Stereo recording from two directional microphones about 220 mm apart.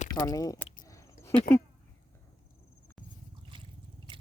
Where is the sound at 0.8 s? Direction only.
15° left (ahead or behind).